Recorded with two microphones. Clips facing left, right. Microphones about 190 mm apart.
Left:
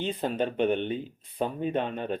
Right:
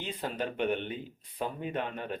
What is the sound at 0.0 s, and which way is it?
Speech, 25° left (ahead or behind).